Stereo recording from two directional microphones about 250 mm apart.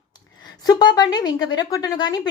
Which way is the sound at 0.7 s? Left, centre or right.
Centre.